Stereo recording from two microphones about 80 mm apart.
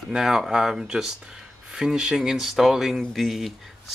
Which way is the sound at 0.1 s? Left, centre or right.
Centre.